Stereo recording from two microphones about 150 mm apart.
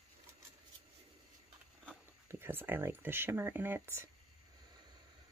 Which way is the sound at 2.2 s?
15° right (ahead or behind).